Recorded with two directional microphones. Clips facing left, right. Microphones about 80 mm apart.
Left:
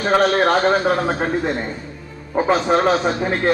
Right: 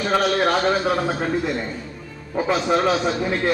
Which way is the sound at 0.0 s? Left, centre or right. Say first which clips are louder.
Left 4 dB; left.